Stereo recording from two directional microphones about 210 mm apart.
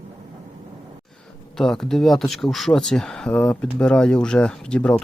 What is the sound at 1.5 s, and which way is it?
Speech, centre (ahead or behind).